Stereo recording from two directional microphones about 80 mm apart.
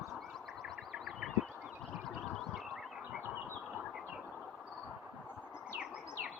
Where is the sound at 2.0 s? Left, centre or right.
Centre.